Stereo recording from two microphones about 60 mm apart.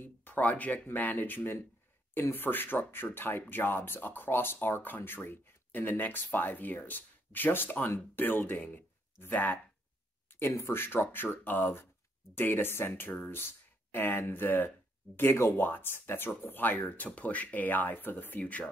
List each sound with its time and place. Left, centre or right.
0.0 s speech: left
10.7 s speech: left